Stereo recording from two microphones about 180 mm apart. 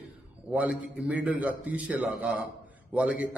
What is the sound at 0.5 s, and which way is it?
A man's voice, 5° right (ahead or behind).